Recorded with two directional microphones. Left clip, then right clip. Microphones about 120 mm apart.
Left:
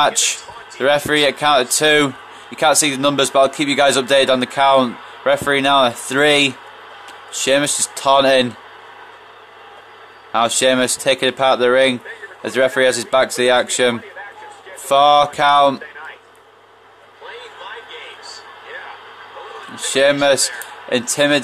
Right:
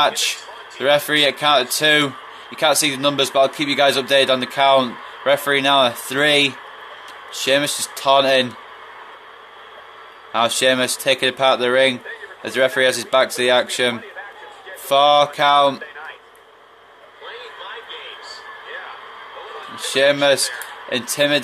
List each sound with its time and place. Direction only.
0.0 s a man's voice: 50° left (ahead or behind)
10.3 s a man's voice: 40° left (ahead or behind)
19.8 s a man's voice: 45° left (ahead or behind)